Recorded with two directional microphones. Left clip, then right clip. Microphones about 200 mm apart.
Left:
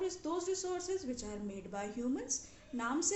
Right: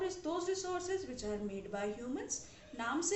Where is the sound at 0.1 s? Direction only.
45° left (ahead or behind).